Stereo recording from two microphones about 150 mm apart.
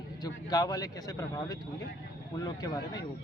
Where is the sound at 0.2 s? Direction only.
25° left (ahead or behind).